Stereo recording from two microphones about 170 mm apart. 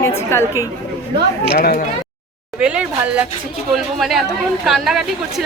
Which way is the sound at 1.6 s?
60° left (ahead or behind).